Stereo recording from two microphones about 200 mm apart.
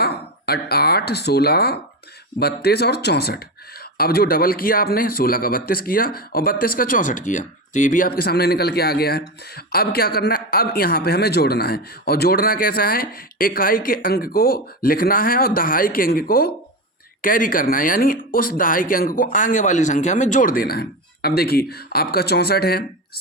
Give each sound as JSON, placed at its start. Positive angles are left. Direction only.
{"t": 0.0, "sound": "a man's voice", "side_deg": 50}